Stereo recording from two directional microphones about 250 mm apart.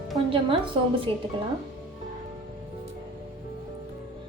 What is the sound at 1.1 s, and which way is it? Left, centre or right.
Speech, centre.